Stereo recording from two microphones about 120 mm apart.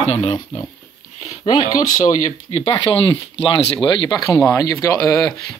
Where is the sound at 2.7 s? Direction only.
45° left (ahead or behind); by 5.5 s 25° left (ahead or behind).